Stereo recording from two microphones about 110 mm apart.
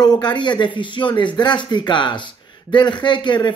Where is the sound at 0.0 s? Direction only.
40° left (ahead or behind).